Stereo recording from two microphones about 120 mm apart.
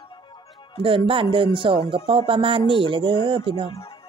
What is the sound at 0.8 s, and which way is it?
Speech, 45° right (ahead or behind).